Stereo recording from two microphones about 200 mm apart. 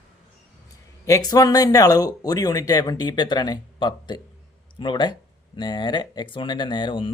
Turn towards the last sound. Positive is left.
turn(degrees=25)  # may be behind; listen again after turning